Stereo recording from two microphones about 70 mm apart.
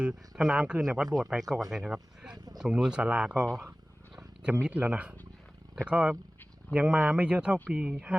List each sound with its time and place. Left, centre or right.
0.0 s speech: centre
2.3 s a sound: right
2.6 s speech: centre
4.4 s speech: centre